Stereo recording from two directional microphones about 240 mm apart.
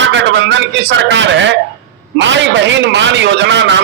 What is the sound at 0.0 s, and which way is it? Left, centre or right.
A man's voice, right.